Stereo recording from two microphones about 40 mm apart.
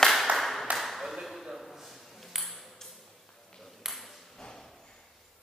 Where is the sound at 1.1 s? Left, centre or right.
Centre.